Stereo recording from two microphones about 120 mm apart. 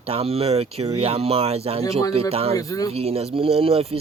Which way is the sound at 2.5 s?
30° left (ahead or behind).